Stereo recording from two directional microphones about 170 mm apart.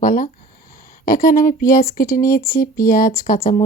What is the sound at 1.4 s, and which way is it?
Speech, 50° left (ahead or behind).